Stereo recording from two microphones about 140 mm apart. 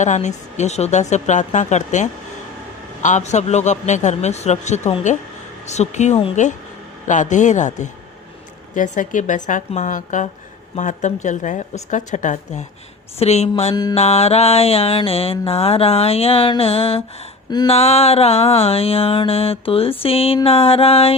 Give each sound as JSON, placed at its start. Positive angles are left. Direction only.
{"t": 0.0, "sound": "a man's voice", "side_deg": 55}
{"t": 13.1, "sound": "mantra", "side_deg": 50}